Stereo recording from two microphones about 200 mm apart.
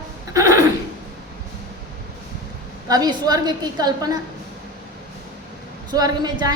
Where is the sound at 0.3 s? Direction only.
15° right (ahead or behind).